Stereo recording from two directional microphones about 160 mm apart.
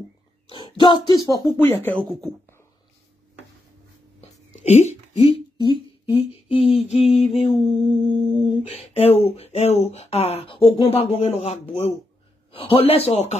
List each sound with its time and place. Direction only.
0.5 s speech: 30° left (ahead or behind); by 2.0 s 15° left (ahead or behind)
4.2 s a sound: 45° left (ahead or behind)
5.2 s speech: 30° left (ahead or behind)